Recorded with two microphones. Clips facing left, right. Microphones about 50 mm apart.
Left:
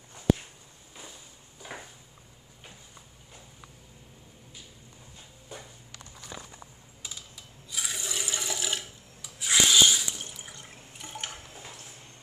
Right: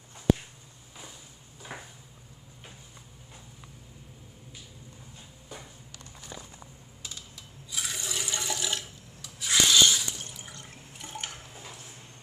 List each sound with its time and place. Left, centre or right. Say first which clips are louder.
1.6 s a sound: even; centre
7.0 s coin: even; centre
7.7 s rub: even; centre